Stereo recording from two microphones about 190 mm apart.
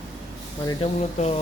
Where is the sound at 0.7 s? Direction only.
30° left (ahead or behind).